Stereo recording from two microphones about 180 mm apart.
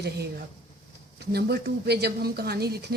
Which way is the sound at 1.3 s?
60° right (ahead or behind).